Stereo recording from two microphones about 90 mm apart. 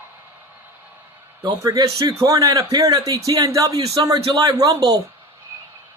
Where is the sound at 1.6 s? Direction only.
35° right (ahead or behind).